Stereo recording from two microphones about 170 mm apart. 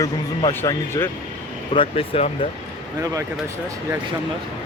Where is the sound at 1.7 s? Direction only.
35° left (ahead or behind).